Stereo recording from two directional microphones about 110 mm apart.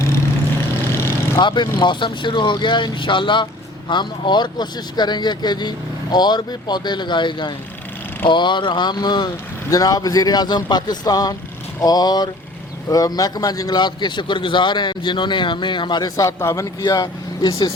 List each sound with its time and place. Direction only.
0.9 s vehicle: 25° left (ahead or behind)
1.4 s a man's voice: 45° left (ahead or behind); by 16.6 s 25° left (ahead or behind)
16.8 s speech: 35° left (ahead or behind)